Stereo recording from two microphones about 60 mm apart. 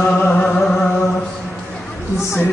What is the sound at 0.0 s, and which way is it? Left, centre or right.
Music, left.